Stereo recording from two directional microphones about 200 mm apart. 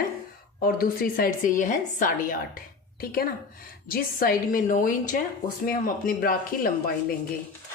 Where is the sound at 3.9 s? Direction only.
45° left (ahead or behind).